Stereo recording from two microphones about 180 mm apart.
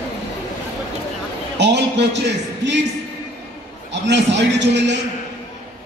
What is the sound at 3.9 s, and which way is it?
A man's voice, 75° right (ahead or behind).